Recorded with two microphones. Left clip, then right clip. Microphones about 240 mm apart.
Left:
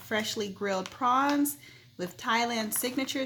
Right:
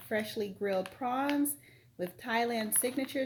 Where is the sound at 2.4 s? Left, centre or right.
Centre.